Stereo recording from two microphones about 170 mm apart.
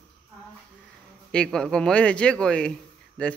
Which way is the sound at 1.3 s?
5° left (ahead or behind).